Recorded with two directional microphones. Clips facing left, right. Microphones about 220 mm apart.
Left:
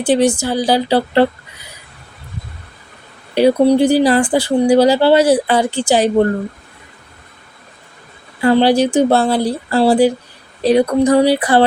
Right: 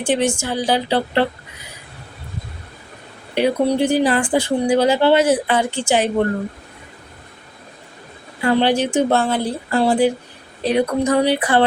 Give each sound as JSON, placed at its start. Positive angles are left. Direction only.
{"t": 0.0, "sound": "a woman's voice", "side_deg": 35}
{"t": 3.3, "sound": "a woman's voice", "side_deg": 35}
{"t": 8.4, "sound": "a woman's voice", "side_deg": 35}